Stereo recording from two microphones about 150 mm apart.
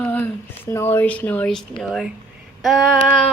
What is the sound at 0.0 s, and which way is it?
A woman's voice, 10° left (ahead or behind).